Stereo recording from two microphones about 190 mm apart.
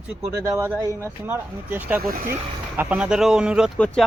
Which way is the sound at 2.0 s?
50° right (ahead or behind).